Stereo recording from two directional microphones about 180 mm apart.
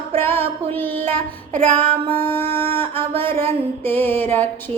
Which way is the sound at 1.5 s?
50° right (ahead or behind).